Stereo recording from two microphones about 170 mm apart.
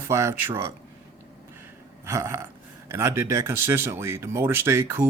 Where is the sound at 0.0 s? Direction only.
15° right (ahead or behind).